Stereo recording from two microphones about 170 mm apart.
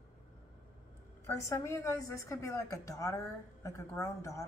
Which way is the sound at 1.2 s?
15° left (ahead or behind).